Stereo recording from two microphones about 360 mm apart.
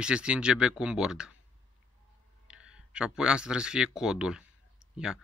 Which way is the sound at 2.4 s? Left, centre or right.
Centre.